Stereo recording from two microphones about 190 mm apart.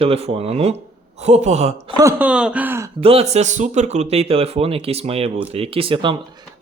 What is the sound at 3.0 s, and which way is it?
Speech, 30° right (ahead or behind).